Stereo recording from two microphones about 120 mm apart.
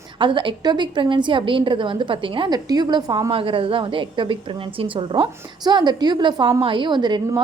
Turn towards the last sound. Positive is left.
turn(degrees=-40)  # may be behind; listen again after turning